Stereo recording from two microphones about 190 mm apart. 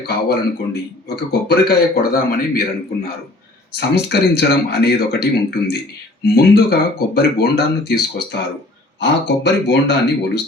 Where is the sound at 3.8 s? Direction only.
60° left (ahead or behind).